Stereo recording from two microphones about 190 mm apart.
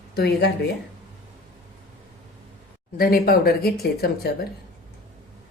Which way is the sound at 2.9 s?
50° left (ahead or behind).